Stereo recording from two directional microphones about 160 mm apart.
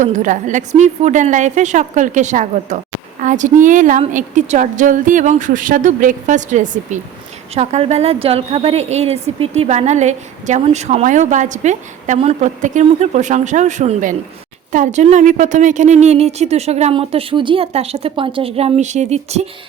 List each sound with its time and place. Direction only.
0.0 s a woman's voice: 50° right (ahead or behind)